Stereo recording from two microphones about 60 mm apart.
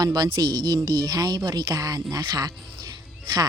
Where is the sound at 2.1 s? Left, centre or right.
Right.